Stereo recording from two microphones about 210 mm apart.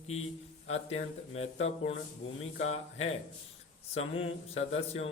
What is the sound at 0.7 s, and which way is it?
Speech, 30° left (ahead or behind).